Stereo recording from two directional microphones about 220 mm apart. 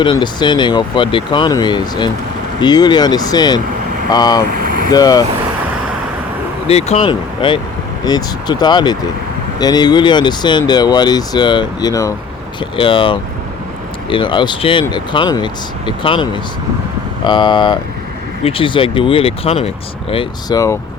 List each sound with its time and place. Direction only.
0.0 s speech: 20° left (ahead or behind)
4.5 s vehicle: 40° right (ahead or behind)
4.9 s speech: 15° left (ahead or behind)
6.7 s speech: 30° left (ahead or behind)